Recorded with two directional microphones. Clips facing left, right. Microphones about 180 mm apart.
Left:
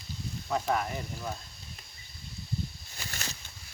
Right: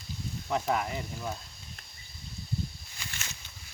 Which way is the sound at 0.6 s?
20° right (ahead or behind).